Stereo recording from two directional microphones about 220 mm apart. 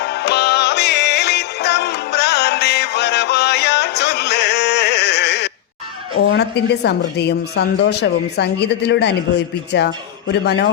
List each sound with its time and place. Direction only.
0.0 s music: 50° left (ahead or behind)
6.8 s speech: 50° left (ahead or behind)